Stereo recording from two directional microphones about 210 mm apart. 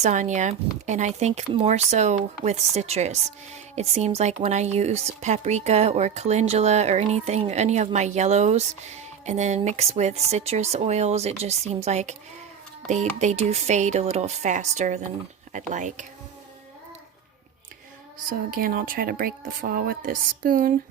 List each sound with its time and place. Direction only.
0.0 s speech: 35° right (ahead or behind)
13.1 s speech: 30° right (ahead or behind)
18.3 s speech: 40° right (ahead or behind)